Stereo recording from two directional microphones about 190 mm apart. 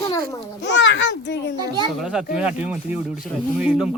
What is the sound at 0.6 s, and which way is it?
Speech, 70° left (ahead or behind).